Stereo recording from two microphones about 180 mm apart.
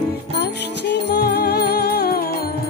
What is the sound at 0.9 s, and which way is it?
Music, 65° left (ahead or behind).